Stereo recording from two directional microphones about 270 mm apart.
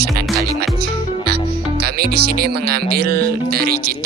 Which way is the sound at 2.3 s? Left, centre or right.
Right.